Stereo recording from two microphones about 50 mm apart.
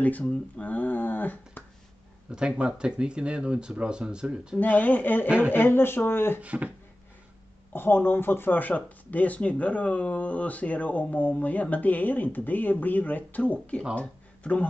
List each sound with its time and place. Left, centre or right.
0.6 s a sound: left
2.3 s speech: centre
4.6 s speech: left
6.4 s speech: right
7.7 s speech: left